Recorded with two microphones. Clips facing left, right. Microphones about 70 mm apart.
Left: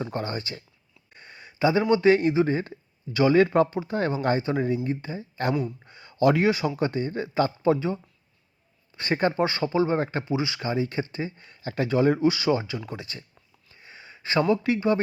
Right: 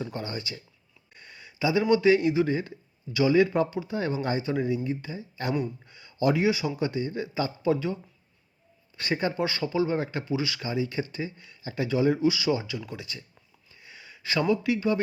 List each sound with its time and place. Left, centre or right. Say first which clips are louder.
0.0 s speech: left 4 dB; left
1.1 s a sound: left 2 dB; left
2.3 s speech: left 2 dB; left
5.8 s a sound: left 3 dB; left
6.1 s speech: left 3 dB; left
9.4 s speech: left 3 dB; left
10.2 s speech: left 2 dB; left
10.6 s speech: left 2 dB; left
11.6 s speech: left 3 dB; left
13.7 s a sound: left 2 dB; left
14.5 s speech: left 1 dB; left